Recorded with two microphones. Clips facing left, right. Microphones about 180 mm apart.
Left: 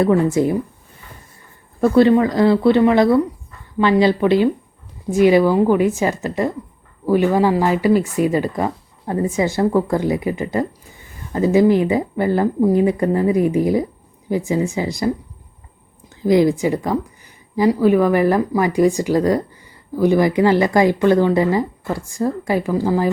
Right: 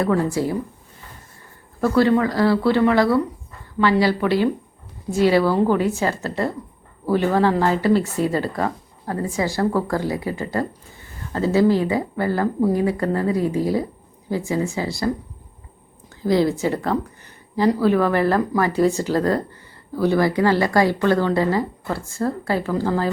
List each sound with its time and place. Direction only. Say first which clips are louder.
0.0 s a woman's voice: left 5 dB; 20° left (ahead or behind)
1.8 s a woman's voice: left 4 dB; 20° left (ahead or behind)
16.2 s speech: left 4 dB; 15° left (ahead or behind)